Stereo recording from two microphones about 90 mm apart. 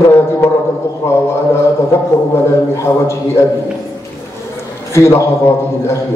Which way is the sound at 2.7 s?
30° left (ahead or behind).